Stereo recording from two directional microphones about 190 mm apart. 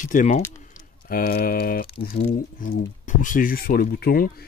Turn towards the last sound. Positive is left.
turn(degrees=50)  # may be behind; listen again after turning